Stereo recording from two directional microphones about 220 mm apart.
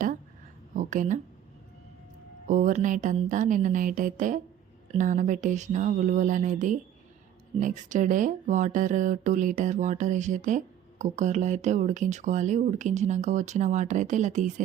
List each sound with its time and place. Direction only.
0.8 s speech: 35° right (ahead or behind)
2.5 s speech: 35° right (ahead or behind)